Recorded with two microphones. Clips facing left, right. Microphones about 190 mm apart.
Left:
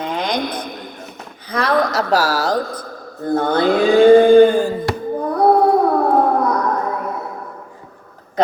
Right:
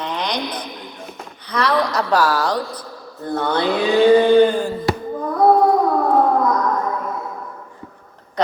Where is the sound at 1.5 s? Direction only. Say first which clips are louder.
Left 2 dB; 50° left (ahead or behind).